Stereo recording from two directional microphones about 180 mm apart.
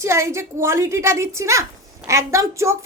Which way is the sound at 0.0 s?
15° right (ahead or behind).